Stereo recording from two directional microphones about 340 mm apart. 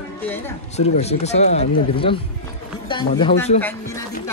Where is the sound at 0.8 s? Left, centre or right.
Centre.